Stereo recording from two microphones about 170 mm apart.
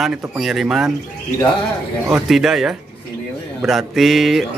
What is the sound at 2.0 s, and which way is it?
A man's voice, 5° right (ahead or behind).